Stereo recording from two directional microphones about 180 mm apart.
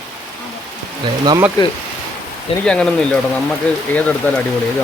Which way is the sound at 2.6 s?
5° left (ahead or behind).